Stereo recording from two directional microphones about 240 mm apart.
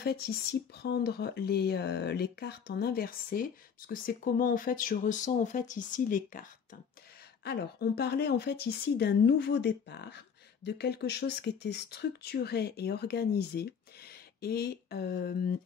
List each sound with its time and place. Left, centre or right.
0.0 s speech: left